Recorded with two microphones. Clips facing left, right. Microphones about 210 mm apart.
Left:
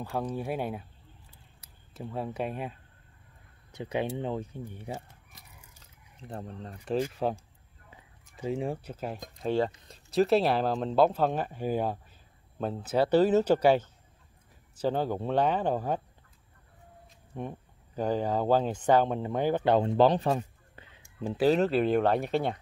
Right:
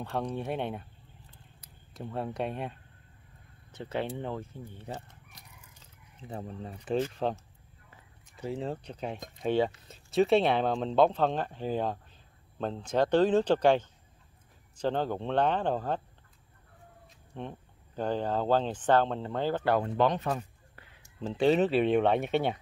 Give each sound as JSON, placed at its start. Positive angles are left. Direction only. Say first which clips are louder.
{"t": 0.0, "sound": "speech", "louder": "left 1 dB", "side_deg": 0}
{"t": 2.0, "sound": "speech", "louder": "even", "side_deg": 0}
{"t": 3.7, "sound": "speech", "louder": "left 2 dB", "side_deg": 15}
{"t": 4.2, "sound": "chicken", "louder": "left 3 dB", "side_deg": 15}
{"t": 6.2, "sound": "speech", "louder": "right 1 dB", "side_deg": -5}
{"t": 7.0, "sound": "speech", "louder": "left 1 dB", "side_deg": 5}
{"t": 17.3, "sound": "speech", "louder": "left 3 dB", "side_deg": 10}
{"t": 20.0, "sound": "a sound", "louder": "left 4 dB", "side_deg": 30}
{"t": 21.0, "sound": "speech", "louder": "left 1 dB", "side_deg": 10}